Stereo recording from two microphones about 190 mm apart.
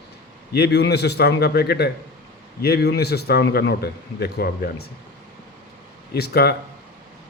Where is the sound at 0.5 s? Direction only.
60° left (ahead or behind).